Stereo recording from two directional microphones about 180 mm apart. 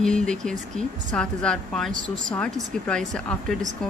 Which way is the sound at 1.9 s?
45° right (ahead or behind).